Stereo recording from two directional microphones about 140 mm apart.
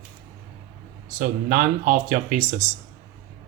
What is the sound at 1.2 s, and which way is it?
Speech, 65° right (ahead or behind).